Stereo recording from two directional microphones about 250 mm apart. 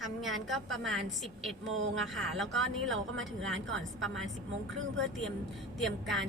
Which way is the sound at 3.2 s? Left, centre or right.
Centre.